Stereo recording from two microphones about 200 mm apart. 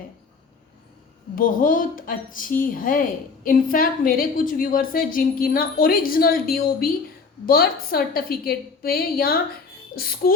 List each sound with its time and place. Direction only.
1.4 s a woman's voice: 45° left (ahead or behind)